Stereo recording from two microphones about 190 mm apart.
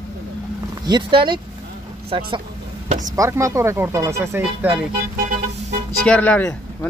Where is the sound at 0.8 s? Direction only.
25° right (ahead or behind).